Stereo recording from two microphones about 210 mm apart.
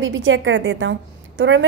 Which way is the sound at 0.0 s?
65° right (ahead or behind).